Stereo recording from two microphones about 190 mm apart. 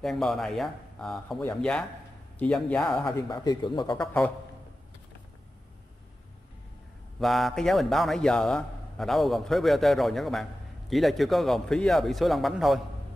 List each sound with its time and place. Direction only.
0.0 s a man's voice: centre (ahead or behind)
3.1 s speech: 20° left (ahead or behind)
7.2 s a man's voice: centre (ahead or behind)